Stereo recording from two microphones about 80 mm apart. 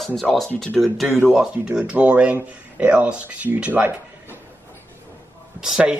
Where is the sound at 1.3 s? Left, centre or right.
Centre.